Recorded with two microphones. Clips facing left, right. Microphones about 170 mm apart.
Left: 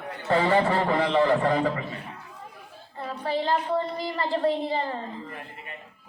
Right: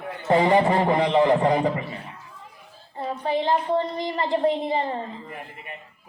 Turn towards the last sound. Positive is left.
turn(degrees=-20)  # may be behind; listen again after turning